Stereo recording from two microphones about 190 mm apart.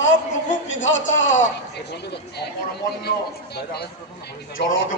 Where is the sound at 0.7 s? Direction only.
80° left.